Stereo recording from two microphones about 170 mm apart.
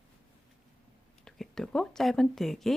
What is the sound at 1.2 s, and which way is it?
Speech, 5° left (ahead or behind).